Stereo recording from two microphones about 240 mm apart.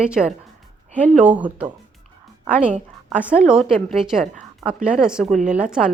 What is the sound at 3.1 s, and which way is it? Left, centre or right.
A woman's voice, centre.